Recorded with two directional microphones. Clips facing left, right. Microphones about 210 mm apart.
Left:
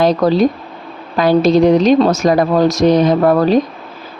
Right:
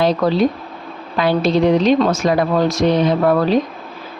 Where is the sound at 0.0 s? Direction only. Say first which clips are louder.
Left 3 dB; 40° left (ahead or behind).